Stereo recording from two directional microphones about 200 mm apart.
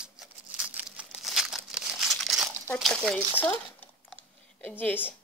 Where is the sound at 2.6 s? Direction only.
5° left (ahead or behind).